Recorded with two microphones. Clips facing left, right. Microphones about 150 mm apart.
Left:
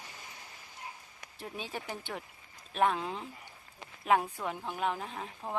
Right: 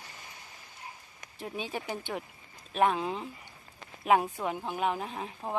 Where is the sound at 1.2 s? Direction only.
Centre (ahead or behind).